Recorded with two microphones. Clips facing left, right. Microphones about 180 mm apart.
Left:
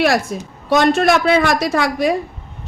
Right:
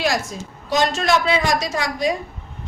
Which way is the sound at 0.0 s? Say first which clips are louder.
Left 6 dB; 60° left (ahead or behind).